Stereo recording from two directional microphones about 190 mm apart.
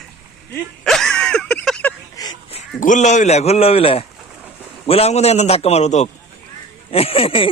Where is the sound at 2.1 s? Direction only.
20° left (ahead or behind).